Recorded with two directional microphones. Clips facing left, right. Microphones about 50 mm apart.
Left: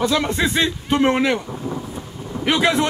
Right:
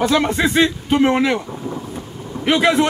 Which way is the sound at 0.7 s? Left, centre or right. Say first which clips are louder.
Right 2 dB; centre.